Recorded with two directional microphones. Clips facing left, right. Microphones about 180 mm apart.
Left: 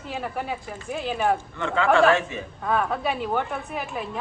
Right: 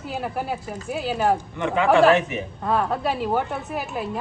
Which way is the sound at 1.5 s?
15° right (ahead or behind).